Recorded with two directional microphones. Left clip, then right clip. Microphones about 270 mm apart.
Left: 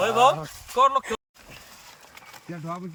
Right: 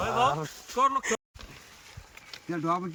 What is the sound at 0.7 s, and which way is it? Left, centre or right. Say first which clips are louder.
Speech: left 5 dB; left.